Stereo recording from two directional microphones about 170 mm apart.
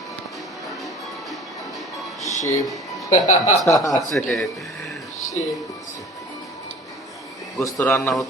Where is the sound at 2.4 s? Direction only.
20° left (ahead or behind).